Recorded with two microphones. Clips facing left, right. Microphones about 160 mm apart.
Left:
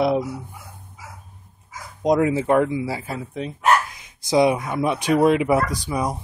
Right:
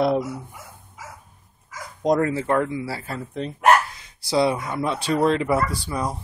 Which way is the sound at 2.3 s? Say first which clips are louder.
Left 4 dB; 15° left (ahead or behind).